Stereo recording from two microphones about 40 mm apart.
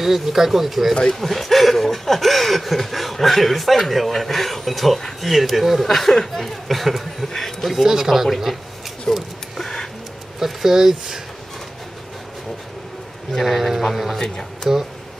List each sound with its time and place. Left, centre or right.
0.0 s speech: centre
7.3 s a sound: centre
7.7 s speech: centre
9.1 s a sound: centre
10.4 s speech: centre
13.4 s speech: centre
14.2 s speech: centre